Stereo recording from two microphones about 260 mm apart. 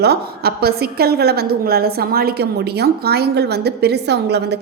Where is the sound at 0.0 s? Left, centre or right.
Right.